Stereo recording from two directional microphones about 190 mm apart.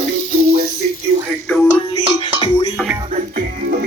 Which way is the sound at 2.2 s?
25° left (ahead or behind).